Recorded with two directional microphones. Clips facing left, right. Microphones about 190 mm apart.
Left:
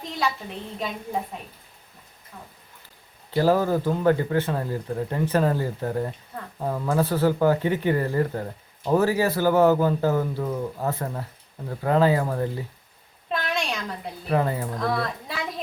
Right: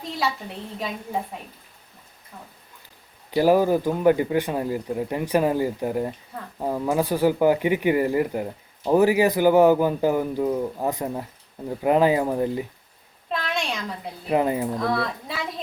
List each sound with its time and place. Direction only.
3.3 s speech: 15° right (ahead or behind)
13.3 s a sound: centre (ahead or behind)
14.3 s speech: 15° right (ahead or behind)
14.8 s a woman's voice: centre (ahead or behind)